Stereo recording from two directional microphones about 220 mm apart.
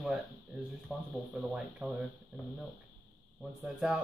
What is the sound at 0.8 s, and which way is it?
Speech, centre (ahead or behind).